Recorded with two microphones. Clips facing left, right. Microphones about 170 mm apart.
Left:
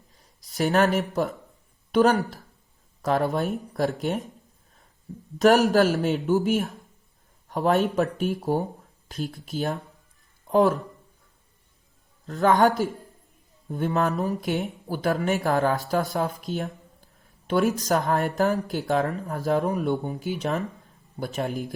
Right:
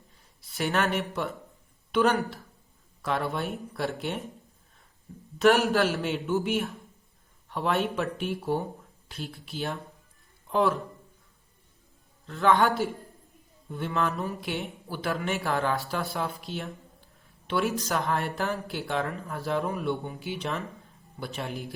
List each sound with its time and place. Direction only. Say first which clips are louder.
0.2 s speech: left 6 dB; 40° left (ahead or behind)
5.4 s speech: left 4 dB; 40° left (ahead or behind)
12.2 s speech: left 4 dB; 40° left (ahead or behind)